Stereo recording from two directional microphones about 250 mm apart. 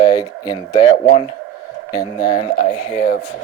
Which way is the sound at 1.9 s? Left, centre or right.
Centre.